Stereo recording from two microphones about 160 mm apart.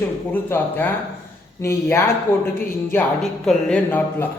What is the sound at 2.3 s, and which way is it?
Speech, 15° left (ahead or behind).